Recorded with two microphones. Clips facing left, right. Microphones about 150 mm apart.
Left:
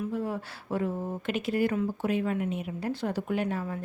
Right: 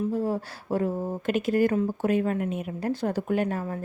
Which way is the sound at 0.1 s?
40° right (ahead or behind).